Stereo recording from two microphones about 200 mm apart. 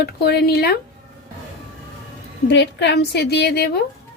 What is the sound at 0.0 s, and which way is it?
Speech, 55° left (ahead or behind).